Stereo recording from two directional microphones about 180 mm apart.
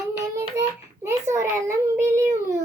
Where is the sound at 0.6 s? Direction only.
20° right (ahead or behind).